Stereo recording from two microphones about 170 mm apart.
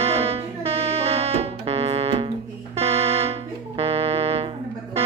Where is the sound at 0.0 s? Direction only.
35° right (ahead or behind).